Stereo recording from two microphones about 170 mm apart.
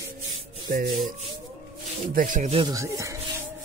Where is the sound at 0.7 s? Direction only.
55° right (ahead or behind).